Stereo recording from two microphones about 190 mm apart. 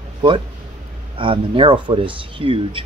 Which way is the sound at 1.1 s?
25° right (ahead or behind).